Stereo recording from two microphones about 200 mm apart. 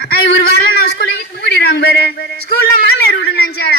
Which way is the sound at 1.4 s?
55° left (ahead or behind).